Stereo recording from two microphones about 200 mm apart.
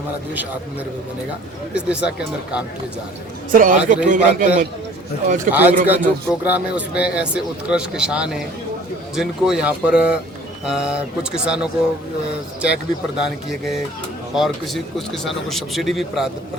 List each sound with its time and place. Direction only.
1.7 s speech: 5° right (ahead or behind)
3.5 s a man's voice: 40° right (ahead or behind)
5.5 s a man's voice: 10° right (ahead or behind)